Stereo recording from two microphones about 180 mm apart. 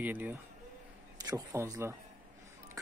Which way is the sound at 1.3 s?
20° right (ahead or behind).